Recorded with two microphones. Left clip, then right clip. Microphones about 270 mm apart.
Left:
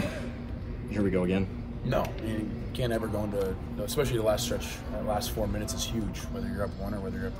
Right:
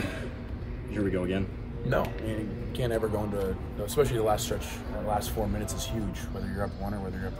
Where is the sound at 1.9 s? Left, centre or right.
Centre.